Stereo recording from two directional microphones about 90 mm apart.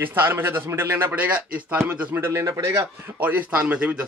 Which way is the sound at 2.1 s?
25° right (ahead or behind).